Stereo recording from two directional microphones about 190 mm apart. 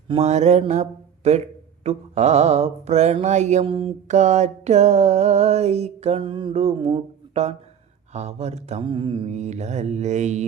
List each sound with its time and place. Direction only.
0.1 s mantra: 35° right (ahead or behind)